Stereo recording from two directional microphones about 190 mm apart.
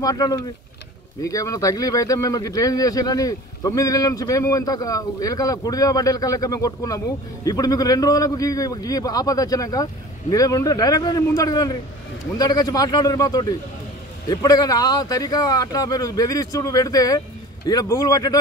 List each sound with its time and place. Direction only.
0.0 s speech: 20° left (ahead or behind)